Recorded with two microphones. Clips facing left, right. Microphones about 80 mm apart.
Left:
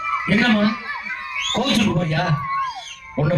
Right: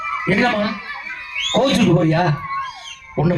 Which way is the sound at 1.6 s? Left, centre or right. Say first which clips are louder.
Right 5 dB; right.